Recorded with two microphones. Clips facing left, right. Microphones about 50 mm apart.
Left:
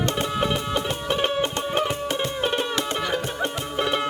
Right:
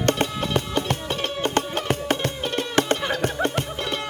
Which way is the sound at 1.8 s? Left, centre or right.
Right.